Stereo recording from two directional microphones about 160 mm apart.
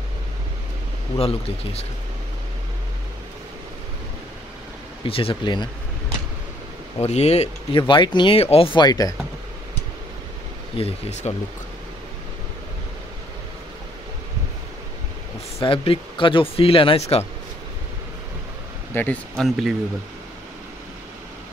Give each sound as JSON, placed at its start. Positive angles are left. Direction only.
{"t": 1.1, "sound": "speech", "side_deg": 40}
{"t": 5.0, "sound": "speech", "side_deg": 35}
{"t": 7.0, "sound": "speech", "side_deg": 40}
{"t": 7.8, "sound": "speech", "side_deg": 30}
{"t": 10.8, "sound": "speech", "side_deg": 45}
{"t": 15.6, "sound": "speech", "side_deg": 35}
{"t": 18.9, "sound": "speech", "side_deg": 5}